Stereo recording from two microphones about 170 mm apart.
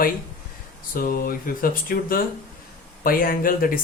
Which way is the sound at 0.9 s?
60° left (ahead or behind).